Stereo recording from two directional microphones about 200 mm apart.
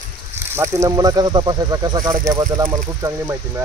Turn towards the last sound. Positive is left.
turn(degrees=-15)  # may be behind; listen again after turning